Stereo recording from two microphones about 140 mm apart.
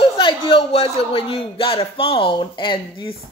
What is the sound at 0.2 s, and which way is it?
Speech, 35° left (ahead or behind).